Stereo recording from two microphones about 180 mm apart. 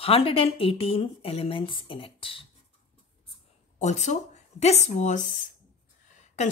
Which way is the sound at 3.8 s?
40° left (ahead or behind).